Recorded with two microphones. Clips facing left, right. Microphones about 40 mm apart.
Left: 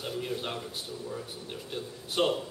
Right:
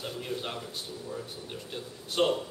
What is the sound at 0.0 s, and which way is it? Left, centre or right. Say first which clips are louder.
Speech: left 1 dB; centre.